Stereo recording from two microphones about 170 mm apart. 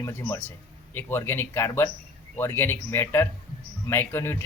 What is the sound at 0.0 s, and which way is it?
Speech, 15° left (ahead or behind).